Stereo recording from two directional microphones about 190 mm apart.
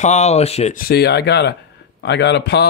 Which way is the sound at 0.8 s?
55° left (ahead or behind).